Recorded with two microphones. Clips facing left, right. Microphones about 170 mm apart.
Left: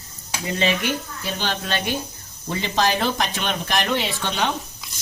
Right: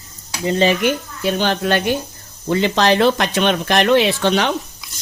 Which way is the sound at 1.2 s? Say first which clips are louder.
Right 9 dB; 60° right (ahead or behind).